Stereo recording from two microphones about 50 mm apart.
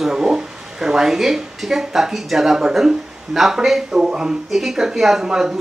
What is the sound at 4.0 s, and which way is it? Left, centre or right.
A woman's voice, centre.